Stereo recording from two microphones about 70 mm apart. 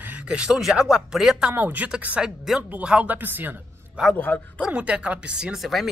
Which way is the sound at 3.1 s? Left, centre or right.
Right.